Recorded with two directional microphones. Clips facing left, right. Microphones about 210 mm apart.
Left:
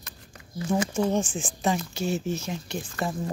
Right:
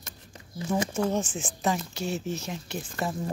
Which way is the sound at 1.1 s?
5° right (ahead or behind).